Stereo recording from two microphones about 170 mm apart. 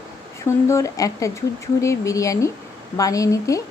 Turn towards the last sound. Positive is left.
turn(degrees=20)  # may be behind; listen again after turning